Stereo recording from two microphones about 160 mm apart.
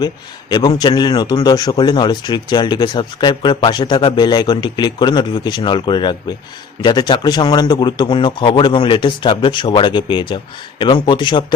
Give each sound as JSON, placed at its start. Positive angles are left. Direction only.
{"t": 0.5, "sound": "speech", "side_deg": 25}